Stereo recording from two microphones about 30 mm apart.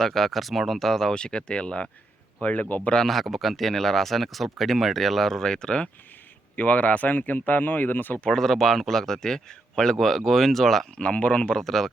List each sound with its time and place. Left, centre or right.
0.0 s speech: centre
1.1 s speech: left
2.4 s a man's voice: left
3.1 s speech: centre
5.4 s speech: left
6.6 s speech: left
8.3 s speech: centre
9.2 s a man's voice: left
10.0 s speech: centre
10.9 s speech: left
11.5 s speech: centre